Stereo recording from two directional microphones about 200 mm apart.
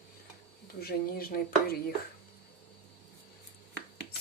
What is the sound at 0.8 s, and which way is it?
Speech, 50° left (ahead or behind).